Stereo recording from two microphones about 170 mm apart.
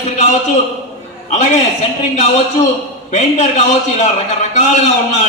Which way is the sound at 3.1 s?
45° left (ahead or behind).